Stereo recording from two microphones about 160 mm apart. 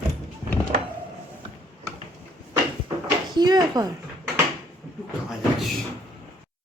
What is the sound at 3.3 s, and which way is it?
Speech, 25° right (ahead or behind).